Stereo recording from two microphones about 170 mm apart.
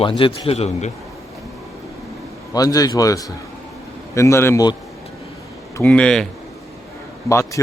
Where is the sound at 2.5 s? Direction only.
20° left (ahead or behind).